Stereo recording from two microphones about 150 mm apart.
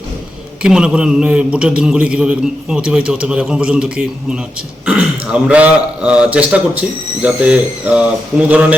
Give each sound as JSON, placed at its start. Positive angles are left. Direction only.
{"t": 0.6, "sound": "a man's voice", "side_deg": -5}